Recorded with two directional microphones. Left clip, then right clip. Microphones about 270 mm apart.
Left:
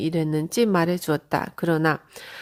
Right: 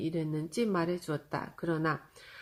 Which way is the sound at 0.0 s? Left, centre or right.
Left.